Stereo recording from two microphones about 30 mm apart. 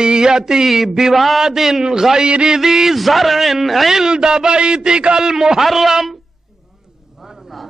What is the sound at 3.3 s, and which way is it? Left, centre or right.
Speech, centre.